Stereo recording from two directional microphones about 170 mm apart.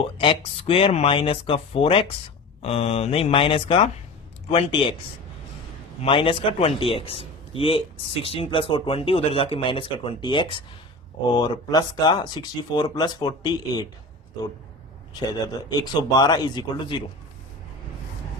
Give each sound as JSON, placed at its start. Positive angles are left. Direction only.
{"t": 0.0, "sound": "speech", "side_deg": 35}
{"t": 6.0, "sound": "speech", "side_deg": 30}
{"t": 15.1, "sound": "speech", "side_deg": 25}